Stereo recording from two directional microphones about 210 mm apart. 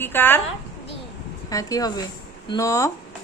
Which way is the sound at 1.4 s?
15° left (ahead or behind).